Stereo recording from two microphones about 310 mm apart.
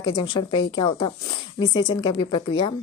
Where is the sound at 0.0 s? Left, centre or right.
Centre.